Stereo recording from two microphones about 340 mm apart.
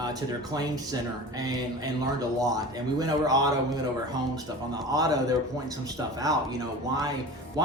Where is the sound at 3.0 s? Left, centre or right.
Centre.